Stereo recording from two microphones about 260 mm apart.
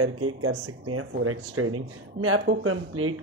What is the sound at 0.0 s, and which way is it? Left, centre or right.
Speech, right.